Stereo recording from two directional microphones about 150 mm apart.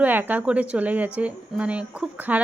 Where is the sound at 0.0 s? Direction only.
10° right (ahead or behind).